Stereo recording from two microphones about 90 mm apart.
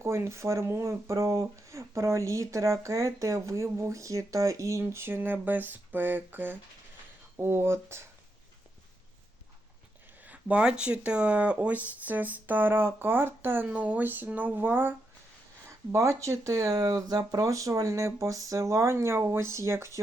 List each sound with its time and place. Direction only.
0.0 s speech: 30° right (ahead or behind)
10.2 s speech: 15° right (ahead or behind)
15.9 s speech: 35° right (ahead or behind)